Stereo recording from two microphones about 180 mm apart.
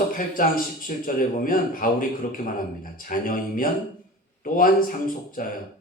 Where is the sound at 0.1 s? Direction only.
50° left (ahead or behind).